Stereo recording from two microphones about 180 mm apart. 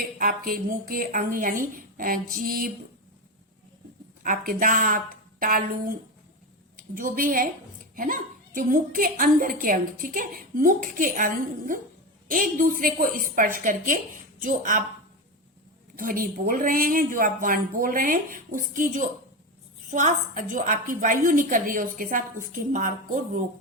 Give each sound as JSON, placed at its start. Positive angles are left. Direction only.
{"t": 0.0, "sound": "a woman's voice", "side_deg": -50}
{"t": 4.2, "sound": "a woman's voice", "side_deg": -50}
{"t": 16.0, "sound": "a woman's voice", "side_deg": -50}